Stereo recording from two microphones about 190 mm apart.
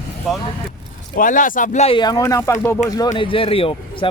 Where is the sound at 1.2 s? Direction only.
45° left (ahead or behind).